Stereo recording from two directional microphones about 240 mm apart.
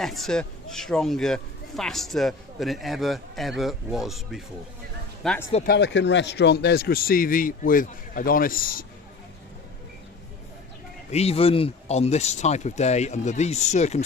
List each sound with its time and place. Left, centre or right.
0.0 s speech: centre
5.6 s speech: left
11.1 s speech: left